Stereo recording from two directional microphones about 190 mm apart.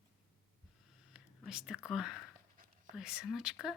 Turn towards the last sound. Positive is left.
turn(degrees=-5)  # may be behind; listen again after turning